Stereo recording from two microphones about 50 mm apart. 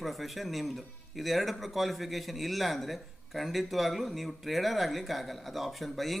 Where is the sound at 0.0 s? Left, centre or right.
Centre.